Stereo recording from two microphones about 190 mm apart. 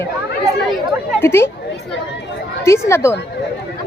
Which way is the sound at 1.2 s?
10° left (ahead or behind).